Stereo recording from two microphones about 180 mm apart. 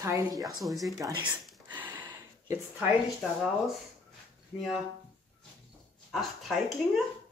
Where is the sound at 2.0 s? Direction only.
10° right (ahead or behind).